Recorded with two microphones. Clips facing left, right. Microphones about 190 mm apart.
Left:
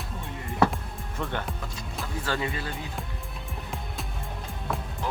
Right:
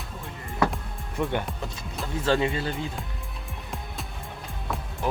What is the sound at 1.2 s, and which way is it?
Speech, 15° right (ahead or behind).